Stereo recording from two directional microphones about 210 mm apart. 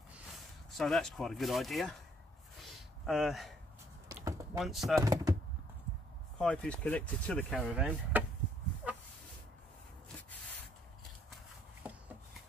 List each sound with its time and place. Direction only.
0.7 s speech: centre (ahead or behind)
2.6 s a sound: centre (ahead or behind)
4.1 s a sound: 15° right (ahead or behind)
4.6 s speech: centre (ahead or behind)
5.0 s speech: 15° right (ahead or behind)
6.3 s speech: 5° left (ahead or behind)
7.5 s speech: 5° right (ahead or behind)